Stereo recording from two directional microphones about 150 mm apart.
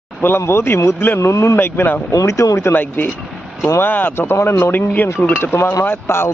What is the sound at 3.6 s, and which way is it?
Speech, 15° left (ahead or behind).